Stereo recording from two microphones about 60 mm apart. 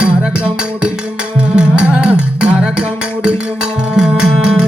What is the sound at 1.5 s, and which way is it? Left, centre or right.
Music, centre.